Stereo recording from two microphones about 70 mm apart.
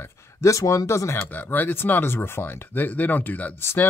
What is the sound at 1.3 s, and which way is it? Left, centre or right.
Speech, left.